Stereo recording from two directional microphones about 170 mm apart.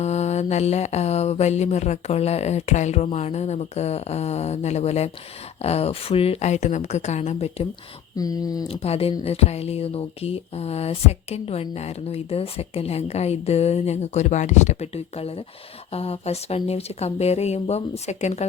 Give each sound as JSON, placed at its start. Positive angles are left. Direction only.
{"t": 0.0, "sound": "a woman's voice", "side_deg": 40}
{"t": 8.2, "sound": "speech", "side_deg": 20}
{"t": 8.6, "sound": "a woman's voice", "side_deg": 35}